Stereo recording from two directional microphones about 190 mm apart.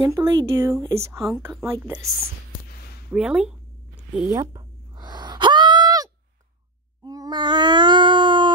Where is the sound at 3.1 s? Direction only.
5° right (ahead or behind).